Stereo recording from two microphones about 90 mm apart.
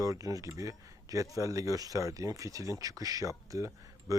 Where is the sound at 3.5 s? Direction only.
35° right (ahead or behind).